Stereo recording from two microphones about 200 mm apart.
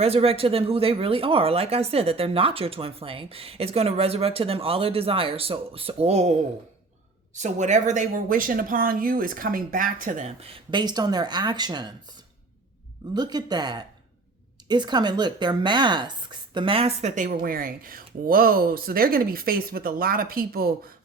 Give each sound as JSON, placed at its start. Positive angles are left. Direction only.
{"t": 0.0, "sound": "speech", "side_deg": -30}
{"t": 7.3, "sound": "speech", "side_deg": -35}
{"t": 13.1, "sound": "speech", "side_deg": -20}